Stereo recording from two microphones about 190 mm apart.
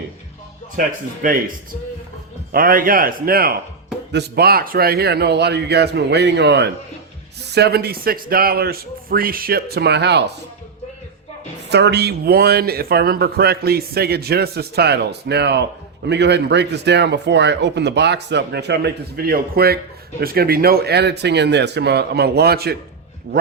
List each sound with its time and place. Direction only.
0.8 s speech: 45° right (ahead or behind); by 10.2 s 65° right (ahead or behind)
11.7 s speech: 60° right (ahead or behind)